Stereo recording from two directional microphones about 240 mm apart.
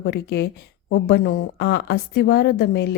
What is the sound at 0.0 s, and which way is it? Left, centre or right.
A woman's voice, left.